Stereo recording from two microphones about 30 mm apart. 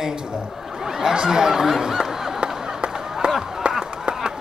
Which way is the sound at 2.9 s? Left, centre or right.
Centre.